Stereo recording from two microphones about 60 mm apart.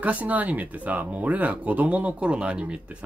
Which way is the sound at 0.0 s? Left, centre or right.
Right.